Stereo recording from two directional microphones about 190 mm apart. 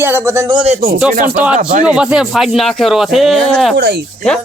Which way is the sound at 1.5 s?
40° right (ahead or behind).